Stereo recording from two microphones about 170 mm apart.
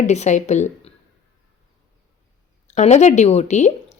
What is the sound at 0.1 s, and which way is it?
Speech, 45° left (ahead or behind).